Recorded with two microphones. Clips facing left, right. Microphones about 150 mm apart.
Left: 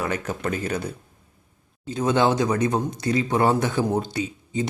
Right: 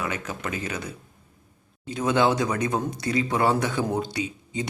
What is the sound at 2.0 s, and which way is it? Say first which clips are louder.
Speech: left 2 dB; 25° left (ahead or behind).